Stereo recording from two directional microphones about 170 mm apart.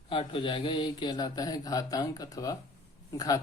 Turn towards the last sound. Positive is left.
turn(degrees=20)  # may be behind; listen again after turning